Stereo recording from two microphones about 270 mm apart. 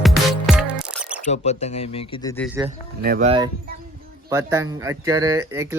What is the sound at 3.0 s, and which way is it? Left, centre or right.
Speech, right.